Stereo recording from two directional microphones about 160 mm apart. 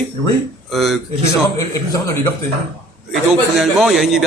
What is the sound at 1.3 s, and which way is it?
A man's voice, 20° left (ahead or behind).